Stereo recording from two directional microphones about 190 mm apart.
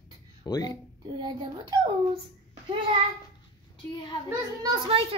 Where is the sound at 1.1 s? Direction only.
25° right (ahead or behind).